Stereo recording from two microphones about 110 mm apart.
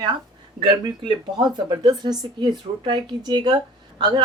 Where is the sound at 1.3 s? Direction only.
40° right (ahead or behind).